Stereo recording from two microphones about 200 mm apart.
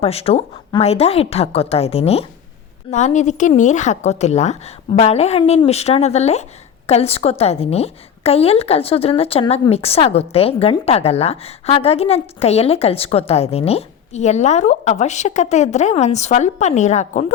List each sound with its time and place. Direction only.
0.0 s a woman's voice: 30° left (ahead or behind)